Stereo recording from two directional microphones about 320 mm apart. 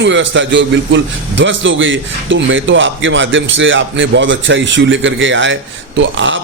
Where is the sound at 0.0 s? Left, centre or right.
Right.